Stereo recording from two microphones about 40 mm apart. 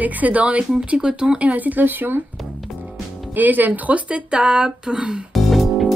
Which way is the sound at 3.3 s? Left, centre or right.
Right.